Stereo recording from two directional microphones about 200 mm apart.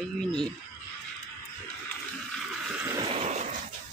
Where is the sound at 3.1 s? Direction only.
35° right (ahead or behind).